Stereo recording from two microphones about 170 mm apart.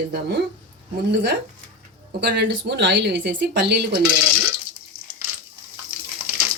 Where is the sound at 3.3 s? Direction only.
75° right (ahead or behind).